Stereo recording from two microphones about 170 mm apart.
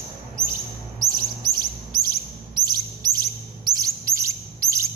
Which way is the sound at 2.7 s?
25° right (ahead or behind).